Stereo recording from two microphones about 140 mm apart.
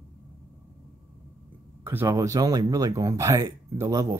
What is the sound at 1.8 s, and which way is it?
Speech, 15° right (ahead or behind).